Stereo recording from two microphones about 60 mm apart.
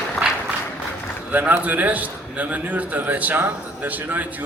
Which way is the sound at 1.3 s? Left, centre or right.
Right.